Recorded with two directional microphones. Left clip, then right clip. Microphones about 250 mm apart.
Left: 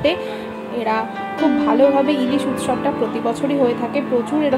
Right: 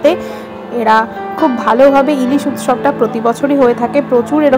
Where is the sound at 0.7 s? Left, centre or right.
Right.